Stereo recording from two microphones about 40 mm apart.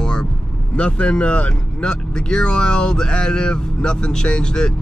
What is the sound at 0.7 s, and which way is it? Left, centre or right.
Speech, left.